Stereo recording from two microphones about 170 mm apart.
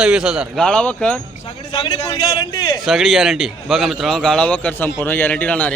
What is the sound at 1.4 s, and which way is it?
A man's voice, 25° left (ahead or behind).